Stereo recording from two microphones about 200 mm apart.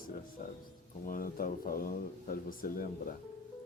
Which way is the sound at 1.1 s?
45° left (ahead or behind).